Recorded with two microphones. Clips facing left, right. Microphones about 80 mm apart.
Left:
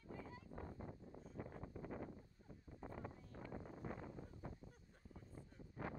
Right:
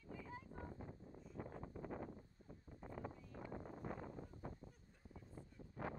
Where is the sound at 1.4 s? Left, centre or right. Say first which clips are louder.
Right 2 dB; right.